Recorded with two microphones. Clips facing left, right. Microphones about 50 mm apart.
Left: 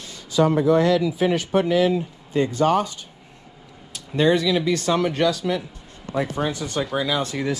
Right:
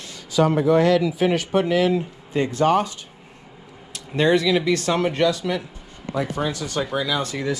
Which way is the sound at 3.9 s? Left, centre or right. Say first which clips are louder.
Even; right.